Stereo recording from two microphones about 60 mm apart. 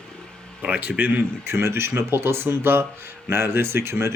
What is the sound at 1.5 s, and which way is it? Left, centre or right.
Speech, right.